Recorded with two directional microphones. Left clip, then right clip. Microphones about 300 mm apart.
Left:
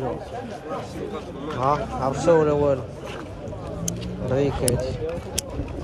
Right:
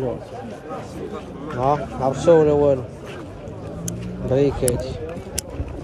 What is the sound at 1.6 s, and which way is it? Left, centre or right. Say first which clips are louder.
Speech: right 2 dB; centre.